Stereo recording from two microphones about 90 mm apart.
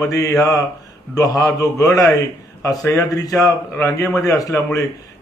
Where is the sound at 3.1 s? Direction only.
40° left (ahead or behind).